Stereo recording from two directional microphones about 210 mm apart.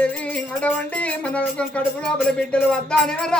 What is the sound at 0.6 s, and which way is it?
Music, 5° left (ahead or behind).